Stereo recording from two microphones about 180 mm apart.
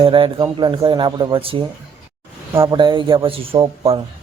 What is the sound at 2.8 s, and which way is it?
A man's voice, 25° right (ahead or behind).